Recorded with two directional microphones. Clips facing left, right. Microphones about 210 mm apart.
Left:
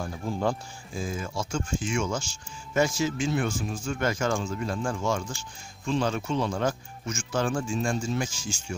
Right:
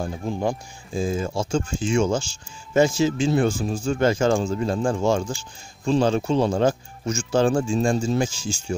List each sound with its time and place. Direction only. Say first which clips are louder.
0.0 s speech: right 3 dB; 20° right (ahead or behind)